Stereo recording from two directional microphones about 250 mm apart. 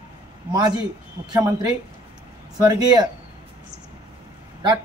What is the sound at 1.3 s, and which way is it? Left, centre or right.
A man's voice, centre.